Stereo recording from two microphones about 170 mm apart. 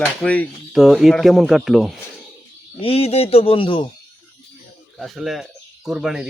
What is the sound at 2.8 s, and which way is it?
A man's voice, 35° left (ahead or behind).